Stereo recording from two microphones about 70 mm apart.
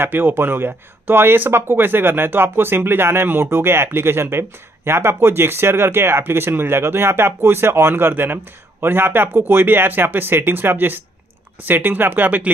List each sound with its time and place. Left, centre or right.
0.0 s speech: right